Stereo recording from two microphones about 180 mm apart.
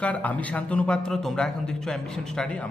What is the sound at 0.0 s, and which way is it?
A man's voice, 10° left (ahead or behind).